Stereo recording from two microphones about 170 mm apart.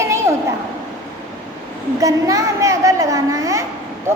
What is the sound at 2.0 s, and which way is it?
A woman's voice, 20° right (ahead or behind).